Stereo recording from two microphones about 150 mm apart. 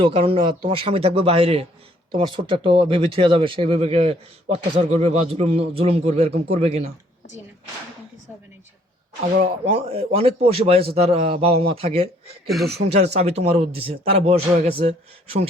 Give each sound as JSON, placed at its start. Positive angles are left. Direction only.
{"t": 0.0, "sound": "speech", "side_deg": -35}
{"t": 9.7, "sound": "speech", "side_deg": -40}
{"t": 12.5, "sound": "speech", "side_deg": 0}
{"t": 13.0, "sound": "a man's voice", "side_deg": -45}